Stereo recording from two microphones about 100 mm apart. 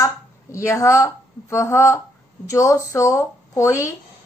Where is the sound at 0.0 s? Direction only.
30° left (ahead or behind).